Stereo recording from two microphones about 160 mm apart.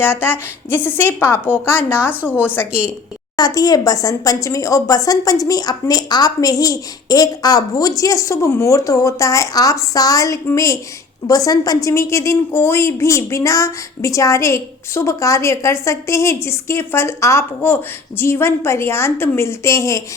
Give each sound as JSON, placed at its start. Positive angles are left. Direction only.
{"t": 0.0, "sound": "a woman's voice", "side_deg": 15}
{"t": 3.3, "sound": "a woman's voice", "side_deg": 25}